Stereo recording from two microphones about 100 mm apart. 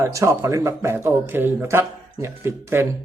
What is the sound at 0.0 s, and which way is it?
A man's voice, 30° right (ahead or behind).